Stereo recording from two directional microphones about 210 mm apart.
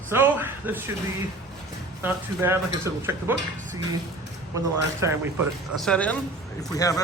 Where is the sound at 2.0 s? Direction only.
10° right (ahead or behind).